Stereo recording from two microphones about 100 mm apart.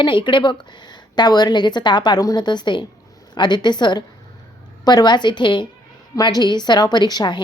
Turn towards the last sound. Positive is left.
turn(degrees=45)  # may be behind; listen again after turning